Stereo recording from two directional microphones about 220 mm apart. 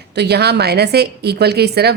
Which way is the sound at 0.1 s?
50° right (ahead or behind).